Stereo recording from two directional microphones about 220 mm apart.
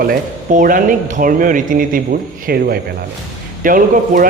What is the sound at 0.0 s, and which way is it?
A man's voice, 40° right (ahead or behind).